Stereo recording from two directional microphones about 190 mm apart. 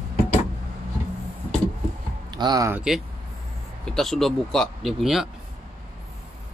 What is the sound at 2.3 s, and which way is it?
Speech, 20° right (ahead or behind).